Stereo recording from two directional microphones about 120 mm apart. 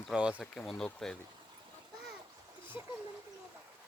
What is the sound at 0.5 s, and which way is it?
Speech, 5° left (ahead or behind).